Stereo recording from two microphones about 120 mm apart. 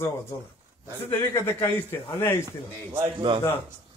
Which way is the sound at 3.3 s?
45° right (ahead or behind).